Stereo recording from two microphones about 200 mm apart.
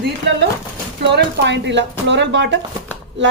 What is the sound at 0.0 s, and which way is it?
Speech, 60° right (ahead or behind).